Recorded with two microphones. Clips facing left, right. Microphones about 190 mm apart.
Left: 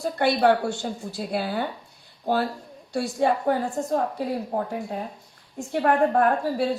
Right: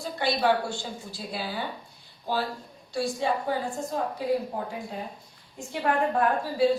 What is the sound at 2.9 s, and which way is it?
A woman's voice, 60° left (ahead or behind).